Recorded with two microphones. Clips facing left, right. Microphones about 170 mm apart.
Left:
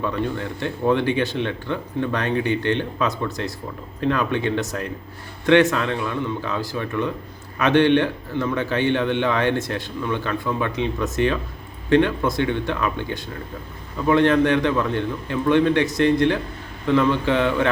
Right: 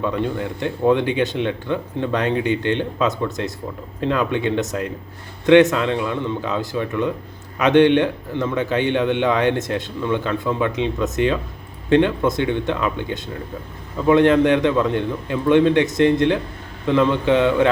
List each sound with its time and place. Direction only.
0.0 s speech: 20° right (ahead or behind)